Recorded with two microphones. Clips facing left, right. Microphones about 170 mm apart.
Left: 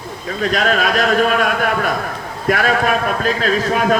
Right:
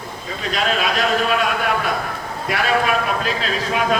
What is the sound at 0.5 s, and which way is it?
Speech, 50° left (ahead or behind).